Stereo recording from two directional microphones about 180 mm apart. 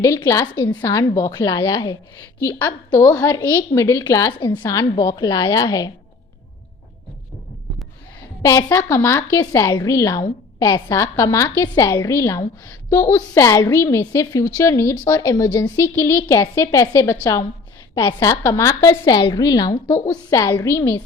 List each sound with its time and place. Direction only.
0.0 s a woman's voice: 15° left (ahead or behind)
8.4 s a woman's voice: 15° left (ahead or behind)